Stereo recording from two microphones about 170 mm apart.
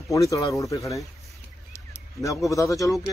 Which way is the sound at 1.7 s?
15° left (ahead or behind).